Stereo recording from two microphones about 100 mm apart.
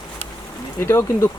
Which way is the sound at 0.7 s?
30° left (ahead or behind).